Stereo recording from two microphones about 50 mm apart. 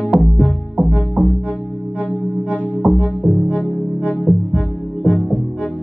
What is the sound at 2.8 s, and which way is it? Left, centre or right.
Music, centre.